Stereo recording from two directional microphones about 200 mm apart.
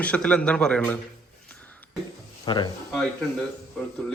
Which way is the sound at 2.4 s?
20° left (ahead or behind).